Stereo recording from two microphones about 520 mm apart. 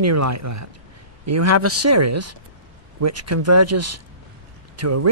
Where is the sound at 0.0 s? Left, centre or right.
Right.